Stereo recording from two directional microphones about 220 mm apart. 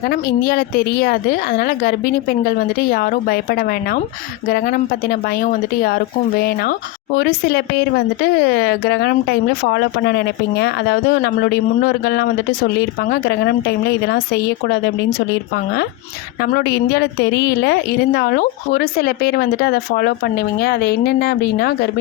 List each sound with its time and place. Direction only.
0.0 s a woman's voice: 40° left (ahead or behind)